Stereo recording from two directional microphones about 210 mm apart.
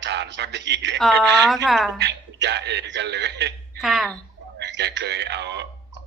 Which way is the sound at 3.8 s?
Centre (ahead or behind).